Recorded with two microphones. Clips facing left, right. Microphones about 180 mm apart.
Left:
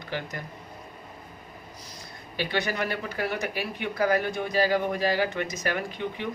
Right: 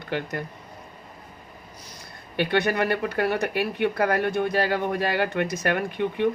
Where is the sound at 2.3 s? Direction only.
60° right (ahead or behind).